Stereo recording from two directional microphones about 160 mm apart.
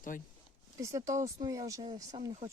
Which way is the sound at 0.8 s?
20° right (ahead or behind).